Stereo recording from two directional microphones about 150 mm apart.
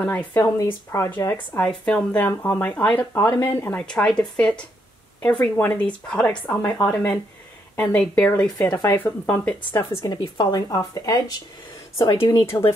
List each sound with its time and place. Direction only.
0.0 s speech: 15° left (ahead or behind)
1.7 s speech: 5° left (ahead or behind)
9.8 s speech: 25° left (ahead or behind)
12.4 s speech: 20° left (ahead or behind)